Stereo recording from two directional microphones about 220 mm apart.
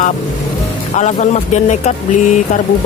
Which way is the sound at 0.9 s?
30° left (ahead or behind).